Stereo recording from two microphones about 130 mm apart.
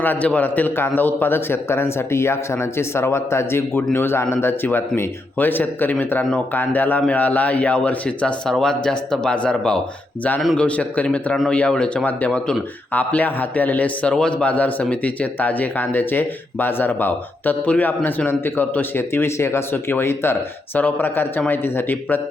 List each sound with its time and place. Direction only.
0.0 s a man's voice: 10° left (ahead or behind)